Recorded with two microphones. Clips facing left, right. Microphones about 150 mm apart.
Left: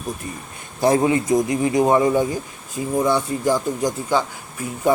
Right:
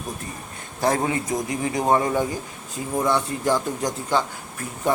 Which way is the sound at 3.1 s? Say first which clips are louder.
Even; 5° left (ahead or behind).